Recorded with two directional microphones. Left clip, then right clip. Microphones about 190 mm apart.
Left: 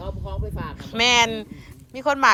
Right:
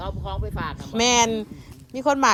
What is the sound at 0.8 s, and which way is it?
A woman's voice, 30° right (ahead or behind).